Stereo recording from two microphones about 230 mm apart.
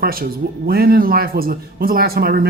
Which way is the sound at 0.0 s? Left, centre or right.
Right.